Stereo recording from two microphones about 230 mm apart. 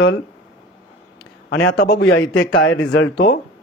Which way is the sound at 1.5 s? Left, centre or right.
Left.